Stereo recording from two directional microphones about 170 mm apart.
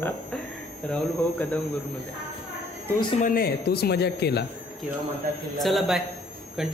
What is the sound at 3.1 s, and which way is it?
Speech, 55° left (ahead or behind).